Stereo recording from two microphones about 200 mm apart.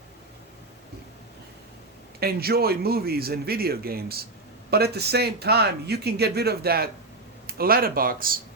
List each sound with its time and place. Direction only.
2.2 s speech: 50° right (ahead or behind)